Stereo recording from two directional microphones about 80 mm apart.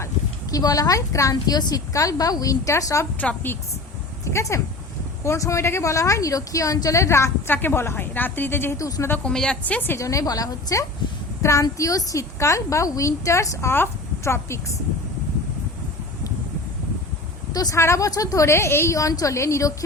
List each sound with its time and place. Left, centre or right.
0.5 s a woman's voice: left
3.2 s a woman's voice: left
4.3 s a woman's voice: left
8.8 s a woman's voice: left
9.2 s a woman's voice: centre
10.0 s a woman's voice: left
17.5 s a woman's voice: left
17.7 s a woman's voice: left
18.9 s a woman's voice: left